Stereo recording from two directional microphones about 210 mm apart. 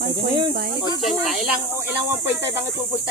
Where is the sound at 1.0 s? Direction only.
Centre (ahead or behind).